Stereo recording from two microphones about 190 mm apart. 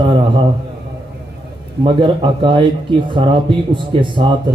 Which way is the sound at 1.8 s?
25° right (ahead or behind).